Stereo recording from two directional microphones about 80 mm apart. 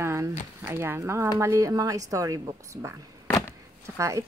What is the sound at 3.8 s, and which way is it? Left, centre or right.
Speech, right.